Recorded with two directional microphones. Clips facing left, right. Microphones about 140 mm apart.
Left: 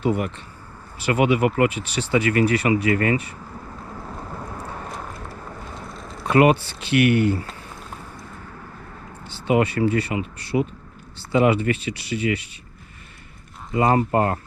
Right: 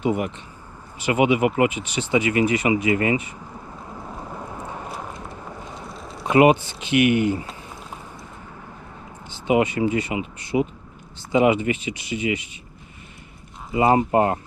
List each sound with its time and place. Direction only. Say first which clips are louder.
0.0 s speech: even; 15° right (ahead or behind)
5.1 s vehicle: even; 20° right (ahead or behind)
5.7 s a sound: even; centre (ahead or behind)
6.2 s speech: right 1 dB; 20° right (ahead or behind)
9.3 s speech: even; 15° right (ahead or behind)
13.7 s speech: right 1 dB; 20° right (ahead or behind)